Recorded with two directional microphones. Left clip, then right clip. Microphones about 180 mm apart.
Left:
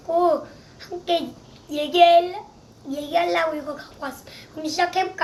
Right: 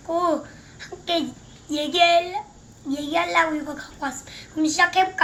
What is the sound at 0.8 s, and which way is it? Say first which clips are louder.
Speech: left 2 dB; 10° left (ahead or behind).